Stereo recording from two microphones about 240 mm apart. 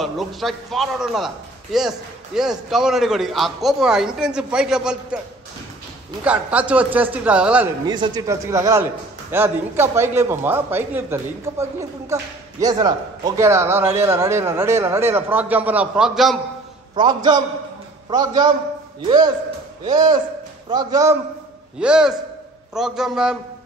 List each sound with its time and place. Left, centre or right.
0.0 s a man's voice: centre
6.2 s a man's voice: centre
7.8 s speech: centre
16.9 s speech: centre
21.7 s a man's voice: centre